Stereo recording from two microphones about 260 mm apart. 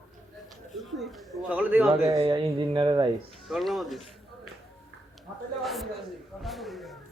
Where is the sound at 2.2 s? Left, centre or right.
Right.